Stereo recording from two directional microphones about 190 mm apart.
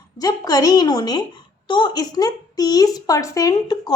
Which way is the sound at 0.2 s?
20° left (ahead or behind).